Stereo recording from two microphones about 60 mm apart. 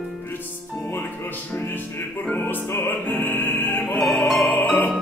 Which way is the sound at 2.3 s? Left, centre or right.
Left.